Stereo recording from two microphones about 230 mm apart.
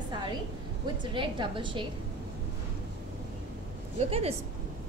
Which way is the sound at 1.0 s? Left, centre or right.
Right.